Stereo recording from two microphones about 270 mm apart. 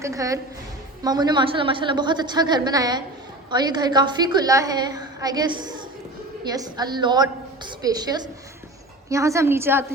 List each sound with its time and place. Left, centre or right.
0.0 s a woman's voice: centre